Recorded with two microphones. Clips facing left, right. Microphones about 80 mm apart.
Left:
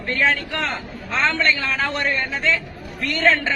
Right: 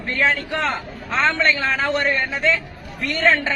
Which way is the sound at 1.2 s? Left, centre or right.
Right.